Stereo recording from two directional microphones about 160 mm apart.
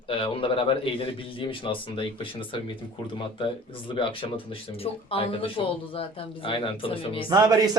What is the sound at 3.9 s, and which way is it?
A man's voice, 35° left (ahead or behind).